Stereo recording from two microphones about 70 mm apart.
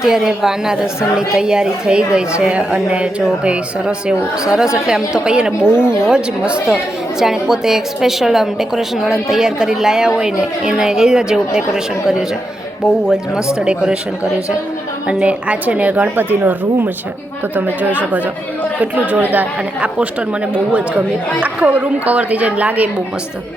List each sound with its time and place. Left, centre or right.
0.0 s a woman's voice: centre
5.7 s speech: left
6.0 s a woman's voice: centre
13.6 s a woman's voice: centre
15.0 s a woman's voice: centre
18.8 s a woman's voice: right
21.4 s a woman's voice: centre